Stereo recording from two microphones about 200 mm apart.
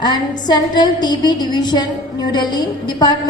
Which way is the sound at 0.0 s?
20° left (ahead or behind).